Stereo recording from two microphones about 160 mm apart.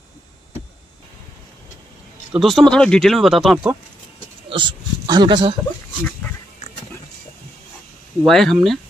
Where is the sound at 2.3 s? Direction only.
Centre (ahead or behind).